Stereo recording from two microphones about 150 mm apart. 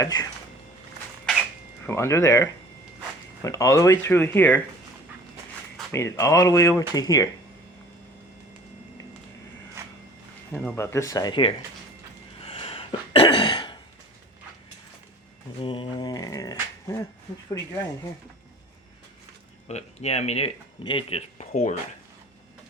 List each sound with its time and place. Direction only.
0.0 s speech: 25° left (ahead or behind)
1.8 s speech: 15° left (ahead or behind)
5.9 s speech: 20° left (ahead or behind)
10.5 s speech: 10° left (ahead or behind)
10.9 s speech: 20° left (ahead or behind)
12.5 s a sound: 40° left (ahead or behind)
15.6 s dog: 35° left (ahead or behind)
19.6 s speech: 45° left (ahead or behind)